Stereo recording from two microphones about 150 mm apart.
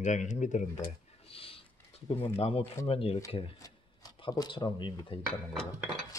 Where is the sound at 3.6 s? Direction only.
25° left (ahead or behind).